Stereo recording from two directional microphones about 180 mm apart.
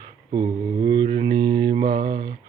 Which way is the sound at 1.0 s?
30° right (ahead or behind).